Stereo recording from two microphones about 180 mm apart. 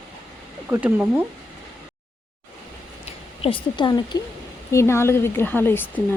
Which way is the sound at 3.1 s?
30° left (ahead or behind).